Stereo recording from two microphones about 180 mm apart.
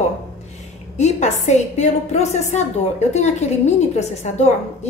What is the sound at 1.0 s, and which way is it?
A woman's voice, 40° left (ahead or behind).